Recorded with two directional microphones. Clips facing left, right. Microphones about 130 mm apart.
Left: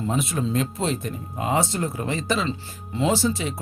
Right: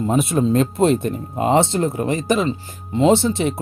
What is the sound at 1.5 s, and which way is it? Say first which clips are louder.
Speech: right 7 dB; 25° right (ahead or behind).